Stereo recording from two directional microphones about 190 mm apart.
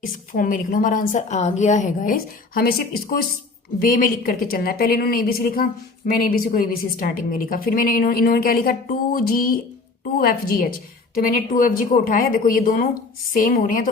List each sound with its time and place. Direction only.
0.0 s a woman's voice: 45° left (ahead or behind)